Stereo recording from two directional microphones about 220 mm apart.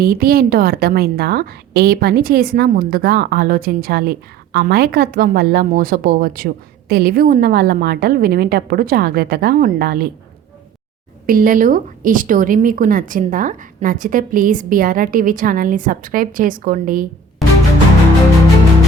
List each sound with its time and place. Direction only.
0.0 s a woman's voice: 45° right (ahead or behind)
11.3 s speech: 40° right (ahead or behind)